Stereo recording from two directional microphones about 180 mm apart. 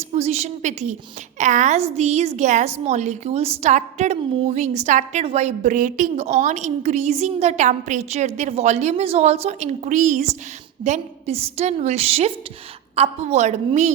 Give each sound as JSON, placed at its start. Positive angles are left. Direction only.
{"t": 0.1, "sound": "a woman's voice", "side_deg": -35}